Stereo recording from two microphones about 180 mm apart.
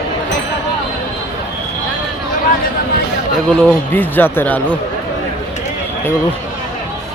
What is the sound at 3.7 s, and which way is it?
Speech, 10° left (ahead or behind).